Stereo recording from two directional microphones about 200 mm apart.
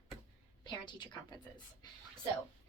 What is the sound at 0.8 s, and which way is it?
Speech, 20° left (ahead or behind).